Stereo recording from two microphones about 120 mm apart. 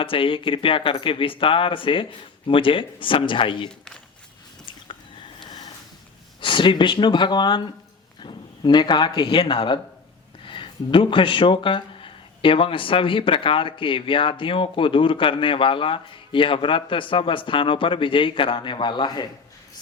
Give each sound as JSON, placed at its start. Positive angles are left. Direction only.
{"t": 0.0, "sound": "speech", "side_deg": 50}
{"t": 6.4, "sound": "speech", "side_deg": 40}